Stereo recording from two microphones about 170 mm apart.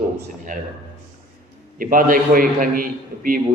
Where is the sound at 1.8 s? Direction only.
55° right (ahead or behind).